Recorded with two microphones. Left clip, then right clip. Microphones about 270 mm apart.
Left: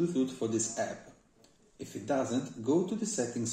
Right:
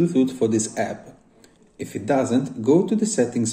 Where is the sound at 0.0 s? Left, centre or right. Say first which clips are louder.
Right 11 dB; right.